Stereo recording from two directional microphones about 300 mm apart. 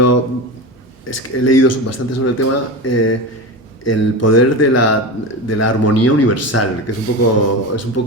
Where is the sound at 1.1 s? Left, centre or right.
Left.